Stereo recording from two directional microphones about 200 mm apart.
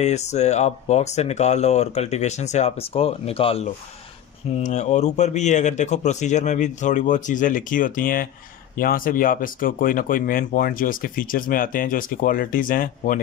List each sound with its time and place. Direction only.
0.0 s speech: 35° left (ahead or behind)